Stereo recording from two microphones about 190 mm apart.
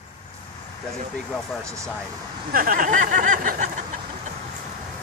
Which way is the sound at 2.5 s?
50° right (ahead or behind).